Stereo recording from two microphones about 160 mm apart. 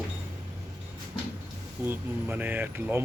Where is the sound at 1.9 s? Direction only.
10° right (ahead or behind).